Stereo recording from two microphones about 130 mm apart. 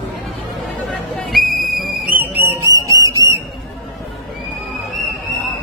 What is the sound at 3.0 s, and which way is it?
Whistle, 25° right (ahead or behind).